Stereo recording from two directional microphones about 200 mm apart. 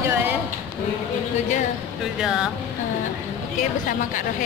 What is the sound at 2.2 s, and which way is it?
Speech, centre (ahead or behind).